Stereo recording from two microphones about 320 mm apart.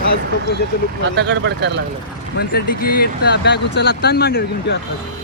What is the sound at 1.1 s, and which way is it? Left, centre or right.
Speech, right.